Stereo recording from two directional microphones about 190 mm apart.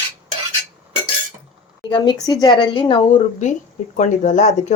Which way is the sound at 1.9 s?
20° left (ahead or behind).